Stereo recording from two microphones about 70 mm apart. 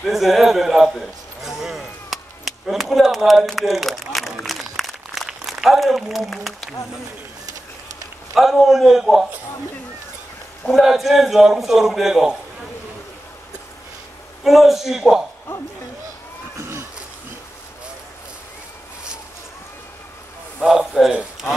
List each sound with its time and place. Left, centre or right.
0.0 s a man's voice: centre
4.4 s a sound: centre
8.4 s a man's voice: centre
10.7 s a man's voice: centre
14.4 s a man's voice: centre
16.5 s a sound: right
20.6 s a man's voice: centre